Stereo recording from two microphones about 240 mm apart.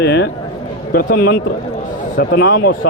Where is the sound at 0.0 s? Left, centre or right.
Left.